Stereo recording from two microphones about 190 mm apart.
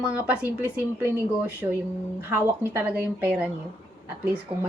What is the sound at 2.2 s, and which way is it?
A woman's voice, 10° right (ahead or behind).